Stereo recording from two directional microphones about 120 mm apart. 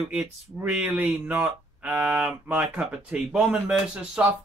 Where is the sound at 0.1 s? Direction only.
10° right (ahead or behind).